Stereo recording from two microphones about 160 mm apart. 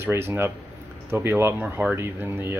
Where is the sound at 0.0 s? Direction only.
15° right (ahead or behind).